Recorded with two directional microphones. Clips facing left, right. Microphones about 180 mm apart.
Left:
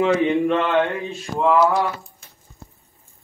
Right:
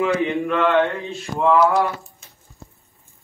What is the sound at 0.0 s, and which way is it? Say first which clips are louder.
Speech: left 3 dB; 25° left (ahead or behind).